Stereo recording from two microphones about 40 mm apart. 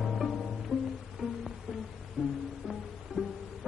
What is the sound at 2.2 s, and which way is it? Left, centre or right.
Music, right.